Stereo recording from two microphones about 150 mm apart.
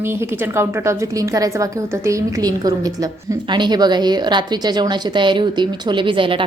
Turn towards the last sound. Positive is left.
turn(degrees=-35)  # may be behind; listen again after turning